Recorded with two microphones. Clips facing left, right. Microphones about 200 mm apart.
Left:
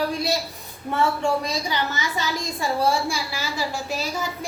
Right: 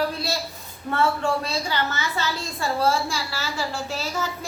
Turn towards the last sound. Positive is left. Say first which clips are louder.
# left 1 dB
turn(degrees=15)  # may be behind; listen again after turning